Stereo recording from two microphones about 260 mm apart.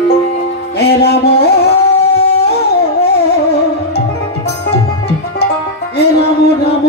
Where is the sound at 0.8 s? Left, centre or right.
Left.